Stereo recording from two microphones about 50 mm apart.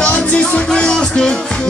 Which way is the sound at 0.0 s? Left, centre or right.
Left.